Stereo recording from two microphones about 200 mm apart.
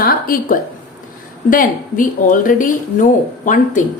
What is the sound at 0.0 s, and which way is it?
A woman's voice, 45° left (ahead or behind).